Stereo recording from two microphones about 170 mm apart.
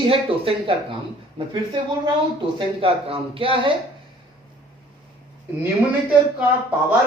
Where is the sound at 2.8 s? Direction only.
35° right (ahead or behind).